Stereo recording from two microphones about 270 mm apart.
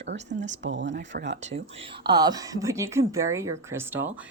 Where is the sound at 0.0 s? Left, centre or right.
Right.